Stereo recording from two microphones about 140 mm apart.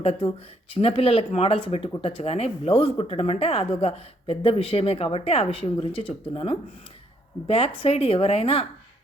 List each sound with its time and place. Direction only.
0.0 s speech: 45° left (ahead or behind)